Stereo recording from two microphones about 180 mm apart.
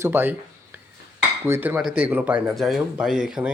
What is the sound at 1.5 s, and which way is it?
Speech, 10° right (ahead or behind).